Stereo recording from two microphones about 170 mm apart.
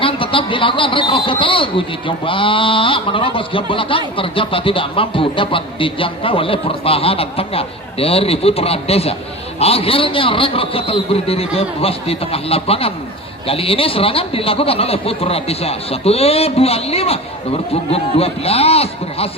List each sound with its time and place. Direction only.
0.0 s speech: 30° left (ahead or behind)